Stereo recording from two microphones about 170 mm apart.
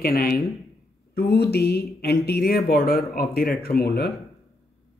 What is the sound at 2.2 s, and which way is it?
Speech, 65° left (ahead or behind).